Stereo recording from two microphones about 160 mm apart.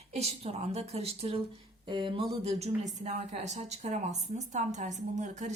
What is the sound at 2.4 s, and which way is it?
Speech, 45° right (ahead or behind).